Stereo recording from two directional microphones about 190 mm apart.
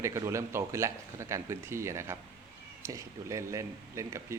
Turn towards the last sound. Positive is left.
turn(degrees=-15)  # may be behind; listen again after turning